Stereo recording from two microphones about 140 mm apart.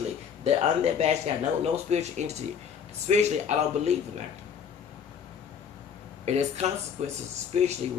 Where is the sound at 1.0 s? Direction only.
50° right (ahead or behind).